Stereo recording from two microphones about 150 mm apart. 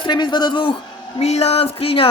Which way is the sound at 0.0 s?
30° left (ahead or behind).